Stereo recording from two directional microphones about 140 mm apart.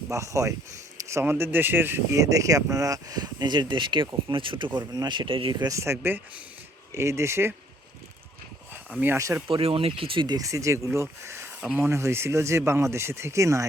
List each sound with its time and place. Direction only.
0.1 s speech: 20° right (ahead or behind)
8.7 s speech: 15° right (ahead or behind)
9.5 s speech: 40° right (ahead or behind); by 13.7 s 20° right (ahead or behind)